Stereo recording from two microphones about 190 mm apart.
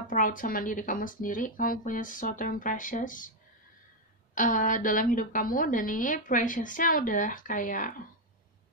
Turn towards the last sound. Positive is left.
turn(degrees=45)  # may be behind; listen again after turning